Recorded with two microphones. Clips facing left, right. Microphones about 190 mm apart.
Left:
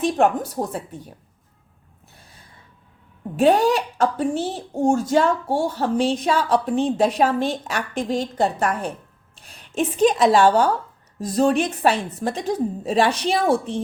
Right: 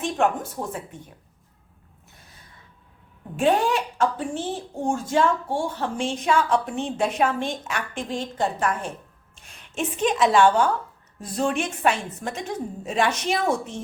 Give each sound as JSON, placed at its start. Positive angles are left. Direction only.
{"t": 0.0, "sound": "a woman's voice", "side_deg": 35}
{"t": 3.3, "sound": "a woman's voice", "side_deg": 40}